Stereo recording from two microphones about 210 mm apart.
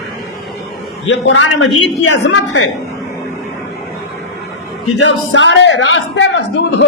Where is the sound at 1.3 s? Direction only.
65° left (ahead or behind).